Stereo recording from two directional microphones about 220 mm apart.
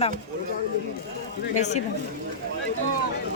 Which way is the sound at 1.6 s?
30° left (ahead or behind).